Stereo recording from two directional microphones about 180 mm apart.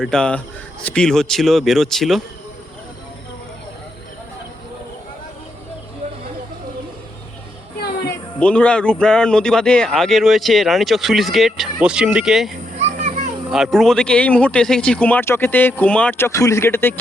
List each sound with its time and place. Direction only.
0.0 s speech: 5° left (ahead or behind)
8.4 s speech: 5° left (ahead or behind)
12.8 s children playing: 40° right (ahead or behind)
13.5 s speech: centre (ahead or behind)